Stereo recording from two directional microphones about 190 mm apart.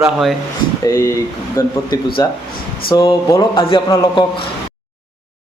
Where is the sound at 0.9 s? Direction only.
15° left (ahead or behind).